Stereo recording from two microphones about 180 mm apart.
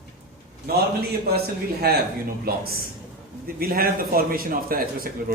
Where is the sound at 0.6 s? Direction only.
60° right (ahead or behind).